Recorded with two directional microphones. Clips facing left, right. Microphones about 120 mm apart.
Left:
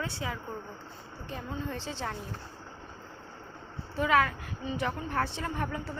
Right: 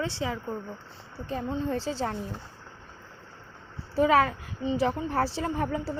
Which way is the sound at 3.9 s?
35° right (ahead or behind).